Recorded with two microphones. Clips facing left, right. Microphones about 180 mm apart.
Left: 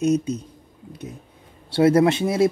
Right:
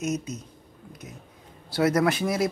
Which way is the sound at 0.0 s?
30° left (ahead or behind).